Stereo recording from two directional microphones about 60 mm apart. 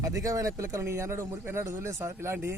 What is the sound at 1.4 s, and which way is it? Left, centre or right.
Speech, right.